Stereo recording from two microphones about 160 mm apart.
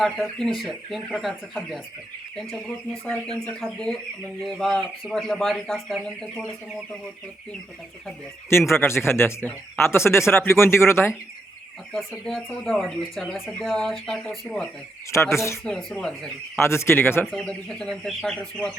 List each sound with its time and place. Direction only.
0.0 s speech: centre (ahead or behind)
8.4 s speech: 15° left (ahead or behind)
11.9 s speech: centre (ahead or behind)
15.1 s speech: 15° left (ahead or behind)
15.6 s speech: 5° left (ahead or behind)
16.6 s speech: 15° left (ahead or behind)